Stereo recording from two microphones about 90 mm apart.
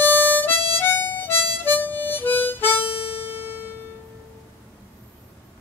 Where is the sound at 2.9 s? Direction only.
90° left.